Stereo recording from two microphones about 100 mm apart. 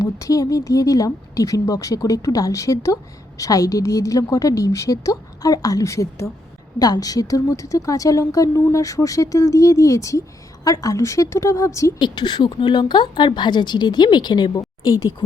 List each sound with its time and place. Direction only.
0.0 s speech: 35° left (ahead or behind)
11.9 s speech: 45° left (ahead or behind)